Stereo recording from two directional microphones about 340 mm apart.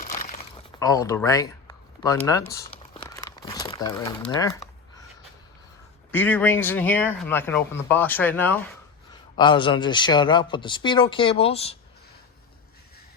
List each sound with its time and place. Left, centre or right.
0.0 s crumpling: left
0.8 s speech: centre
2.5 s crumpling: centre
6.1 s speech: centre